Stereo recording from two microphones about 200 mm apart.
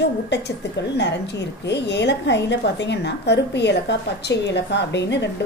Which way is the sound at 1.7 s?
60° left (ahead or behind).